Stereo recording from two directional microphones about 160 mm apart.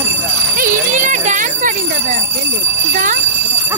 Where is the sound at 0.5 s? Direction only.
55° right (ahead or behind).